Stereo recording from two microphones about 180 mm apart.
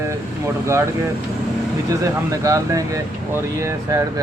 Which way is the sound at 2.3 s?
20° right (ahead or behind).